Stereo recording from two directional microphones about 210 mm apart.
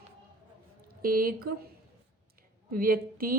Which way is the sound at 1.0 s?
45° right (ahead or behind).